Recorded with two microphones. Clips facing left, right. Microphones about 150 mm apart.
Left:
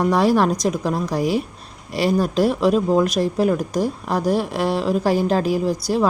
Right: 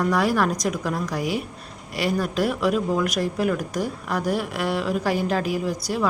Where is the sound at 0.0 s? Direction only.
30° left (ahead or behind).